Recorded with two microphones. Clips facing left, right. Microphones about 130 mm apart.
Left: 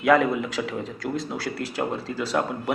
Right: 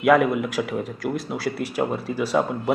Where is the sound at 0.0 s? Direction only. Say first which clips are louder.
Right 2 dB; 10° right (ahead or behind).